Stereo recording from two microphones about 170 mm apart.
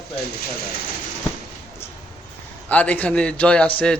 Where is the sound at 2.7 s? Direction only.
10° left (ahead or behind).